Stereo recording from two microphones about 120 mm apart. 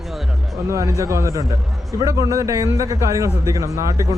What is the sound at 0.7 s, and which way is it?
A man's voice, 25° right (ahead or behind).